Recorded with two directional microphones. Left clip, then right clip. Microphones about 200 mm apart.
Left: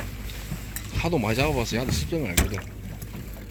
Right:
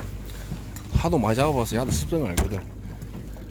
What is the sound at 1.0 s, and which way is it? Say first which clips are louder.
Speech: right 2 dB; 20° right (ahead or behind).